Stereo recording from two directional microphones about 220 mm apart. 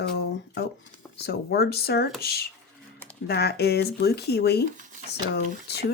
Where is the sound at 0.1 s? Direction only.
45° left (ahead or behind).